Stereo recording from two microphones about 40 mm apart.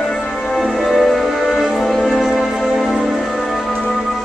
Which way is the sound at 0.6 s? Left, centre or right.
Centre.